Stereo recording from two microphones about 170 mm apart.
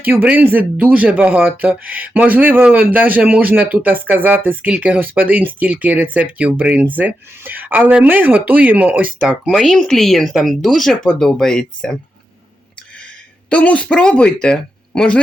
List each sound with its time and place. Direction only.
0.0 s speech: 10° right (ahead or behind)
13.5 s speech: 10° left (ahead or behind)